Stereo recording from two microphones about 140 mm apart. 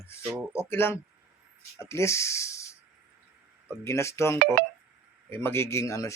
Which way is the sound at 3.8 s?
20° left (ahead or behind).